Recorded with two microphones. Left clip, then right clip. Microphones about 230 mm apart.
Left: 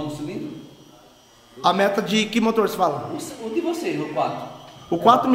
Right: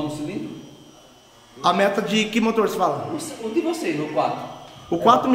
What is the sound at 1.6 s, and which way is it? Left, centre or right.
A man's voice, centre.